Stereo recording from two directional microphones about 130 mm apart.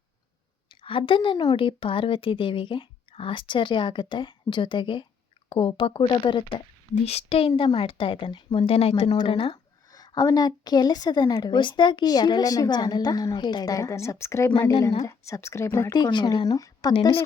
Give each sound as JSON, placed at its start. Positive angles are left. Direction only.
{"t": 0.8, "sound": "a woman's voice", "side_deg": 45}
{"t": 7.0, "sound": "a woman's voice", "side_deg": 50}
{"t": 9.0, "sound": "a woman's voice", "side_deg": 40}
{"t": 9.9, "sound": "a woman's voice", "side_deg": 30}
{"t": 16.0, "sound": "a woman's voice", "side_deg": 35}